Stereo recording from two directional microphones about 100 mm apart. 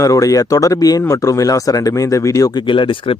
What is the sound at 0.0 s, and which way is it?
Speech, 35° left (ahead or behind).